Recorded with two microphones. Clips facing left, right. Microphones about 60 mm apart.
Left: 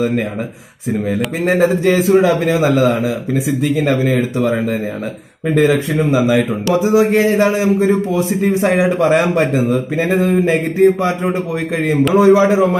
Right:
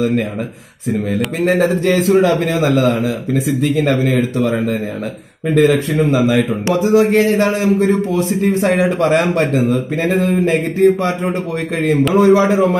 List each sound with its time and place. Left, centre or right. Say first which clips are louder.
1.5 s a man's voice: left 2 dB; centre
3.7 s a man's voice: even; centre
5.5 s a man's voice: right 1 dB; centre